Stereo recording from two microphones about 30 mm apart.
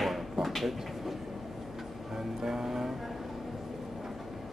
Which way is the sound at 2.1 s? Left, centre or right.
Centre.